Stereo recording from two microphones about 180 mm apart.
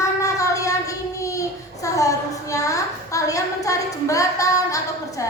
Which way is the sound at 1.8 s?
20° left (ahead or behind).